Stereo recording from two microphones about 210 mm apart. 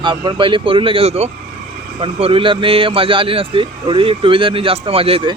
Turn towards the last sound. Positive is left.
turn(degrees=-25)  # may be behind; listen again after turning